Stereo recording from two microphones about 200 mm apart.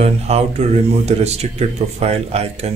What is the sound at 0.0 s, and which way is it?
Speech, 30° right (ahead or behind).